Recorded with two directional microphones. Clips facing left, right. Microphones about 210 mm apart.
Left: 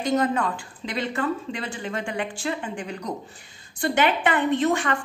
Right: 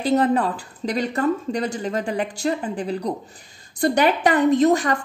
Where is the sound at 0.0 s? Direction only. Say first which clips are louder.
Right 4 dB; 35° right (ahead or behind).